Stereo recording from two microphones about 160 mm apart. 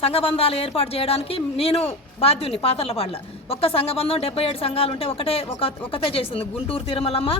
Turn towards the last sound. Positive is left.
turn(degrees=35)  # may be behind; listen again after turning